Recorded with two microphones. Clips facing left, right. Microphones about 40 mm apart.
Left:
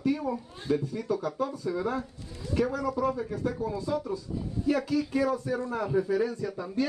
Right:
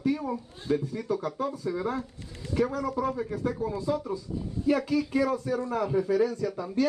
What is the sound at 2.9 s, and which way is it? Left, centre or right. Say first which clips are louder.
Speech: even; centre.